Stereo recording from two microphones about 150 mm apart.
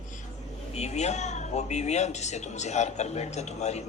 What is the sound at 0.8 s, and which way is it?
A woman's voice, 50° left (ahead or behind).